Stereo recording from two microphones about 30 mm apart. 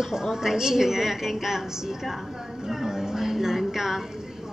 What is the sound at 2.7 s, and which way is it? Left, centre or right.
Music, centre.